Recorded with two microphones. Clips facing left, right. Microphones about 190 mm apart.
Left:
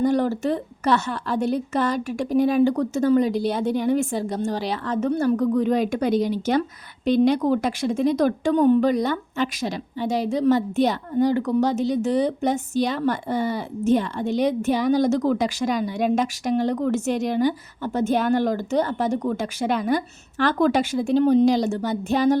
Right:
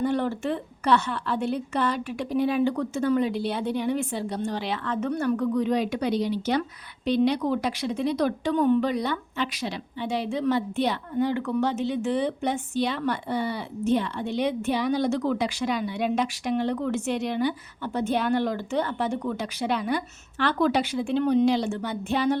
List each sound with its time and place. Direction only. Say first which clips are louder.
0.0 s a woman's voice: left 5 dB; 40° left (ahead or behind)